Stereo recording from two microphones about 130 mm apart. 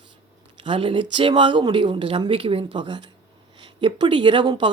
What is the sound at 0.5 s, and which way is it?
Speech, 40° right (ahead or behind).